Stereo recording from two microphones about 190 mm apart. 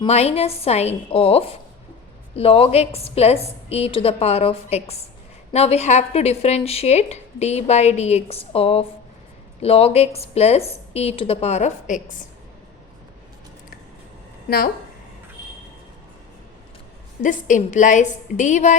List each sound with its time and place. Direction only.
0.0 s a woman's voice: 35° left (ahead or behind)
17.2 s a woman's voice: 40° left (ahead or behind)